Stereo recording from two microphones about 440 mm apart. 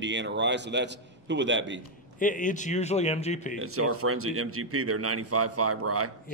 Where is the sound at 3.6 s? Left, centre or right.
Right.